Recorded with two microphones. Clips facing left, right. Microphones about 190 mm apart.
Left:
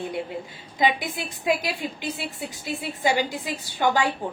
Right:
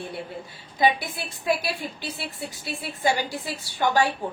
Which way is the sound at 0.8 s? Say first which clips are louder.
Right 1 dB; 15° left (ahead or behind).